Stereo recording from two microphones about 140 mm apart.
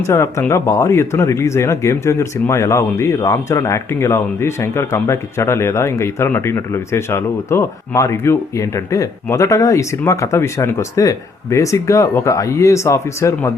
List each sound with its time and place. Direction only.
0.1 s speech: 20° left (ahead or behind)